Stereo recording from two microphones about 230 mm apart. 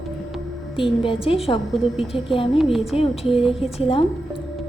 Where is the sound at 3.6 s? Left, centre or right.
Left.